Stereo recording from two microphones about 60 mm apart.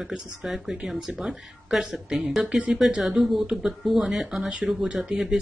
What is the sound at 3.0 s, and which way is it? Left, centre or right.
Speech, centre.